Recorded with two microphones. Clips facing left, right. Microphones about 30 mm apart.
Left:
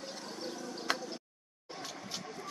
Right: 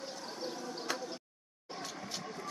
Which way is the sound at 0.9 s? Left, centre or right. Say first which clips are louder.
Left 4 dB; left.